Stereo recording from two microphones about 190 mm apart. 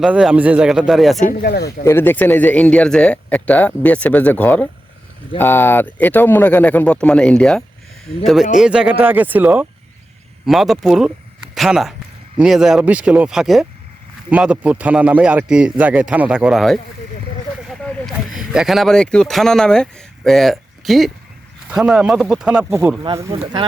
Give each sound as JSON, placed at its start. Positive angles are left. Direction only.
{"t": 0.0, "sound": "speech", "side_deg": -5}
{"t": 1.2, "sound": "speech", "side_deg": 45}
{"t": 1.8, "sound": "speech", "side_deg": 15}
{"t": 23.0, "sound": "speech", "side_deg": -25}